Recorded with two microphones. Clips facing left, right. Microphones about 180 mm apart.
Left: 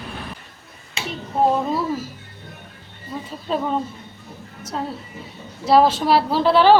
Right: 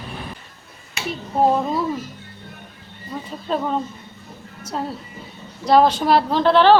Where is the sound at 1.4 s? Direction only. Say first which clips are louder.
Right 1 dB; centre (ahead or behind).